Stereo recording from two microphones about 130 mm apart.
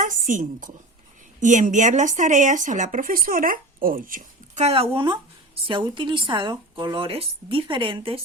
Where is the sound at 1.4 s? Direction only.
70° right (ahead or behind); by 4.7 s 90° right.